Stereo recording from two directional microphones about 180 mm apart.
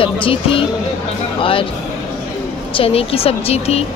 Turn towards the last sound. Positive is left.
turn(degrees=35)  # may be behind; listen again after turning